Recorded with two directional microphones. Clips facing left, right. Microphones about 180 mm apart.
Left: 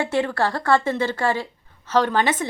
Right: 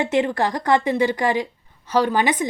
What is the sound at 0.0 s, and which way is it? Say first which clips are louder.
A woman's voice: right 2 dB; 20° right (ahead or behind).